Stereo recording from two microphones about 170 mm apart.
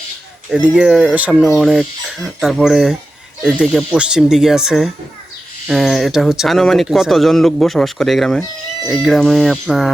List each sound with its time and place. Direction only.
0.5 s speech: 5° right (ahead or behind)